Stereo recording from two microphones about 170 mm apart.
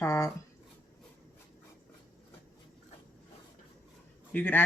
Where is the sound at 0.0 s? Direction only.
15° left (ahead or behind).